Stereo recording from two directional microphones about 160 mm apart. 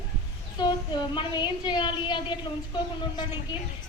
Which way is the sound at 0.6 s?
25° left (ahead or behind).